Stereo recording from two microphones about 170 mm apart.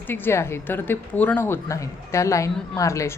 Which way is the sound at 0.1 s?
15° left (ahead or behind).